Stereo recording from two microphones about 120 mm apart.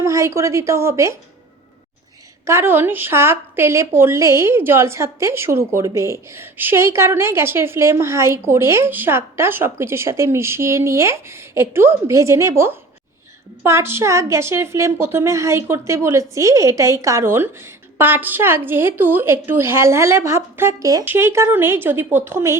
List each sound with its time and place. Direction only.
0.0 s a woman's voice: 25° right (ahead or behind)
2.4 s a woman's voice: 20° right (ahead or behind)